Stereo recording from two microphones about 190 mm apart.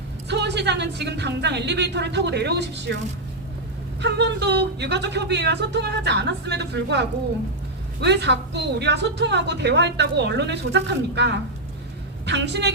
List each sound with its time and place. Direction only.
0.3 s a woman's voice: 65° right (ahead or behind)
4.0 s a woman's voice: 65° right (ahead or behind)